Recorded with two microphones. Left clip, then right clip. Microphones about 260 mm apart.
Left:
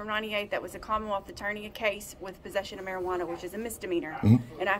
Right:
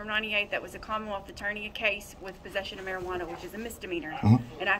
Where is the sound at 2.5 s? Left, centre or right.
Centre.